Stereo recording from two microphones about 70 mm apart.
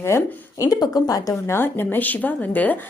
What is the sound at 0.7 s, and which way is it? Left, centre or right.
Speech, left.